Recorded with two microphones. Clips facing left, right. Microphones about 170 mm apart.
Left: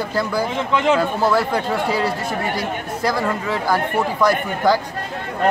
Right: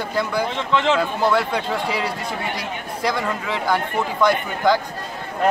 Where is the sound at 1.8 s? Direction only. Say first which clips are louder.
Left 4 dB; 30° left (ahead or behind).